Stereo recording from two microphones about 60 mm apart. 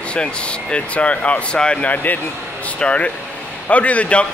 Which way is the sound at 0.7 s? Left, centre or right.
Left.